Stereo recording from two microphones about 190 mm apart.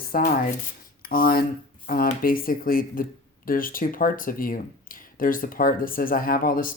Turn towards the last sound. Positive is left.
turn(degrees=50)  # may be behind; listen again after turning